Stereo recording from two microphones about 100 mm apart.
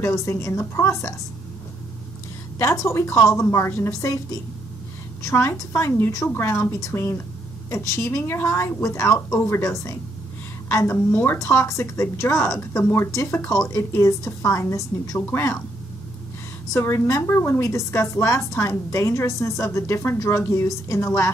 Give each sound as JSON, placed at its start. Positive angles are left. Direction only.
{"t": 0.0, "sound": "a woman's voice", "side_deg": 25}
{"t": 2.6, "sound": "a woman's voice", "side_deg": 30}
{"t": 5.2, "sound": "a woman's voice", "side_deg": 25}
{"t": 16.7, "sound": "a woman's voice", "side_deg": 25}